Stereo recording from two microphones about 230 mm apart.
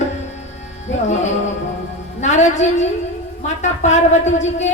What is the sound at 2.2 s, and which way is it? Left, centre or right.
Speech, left.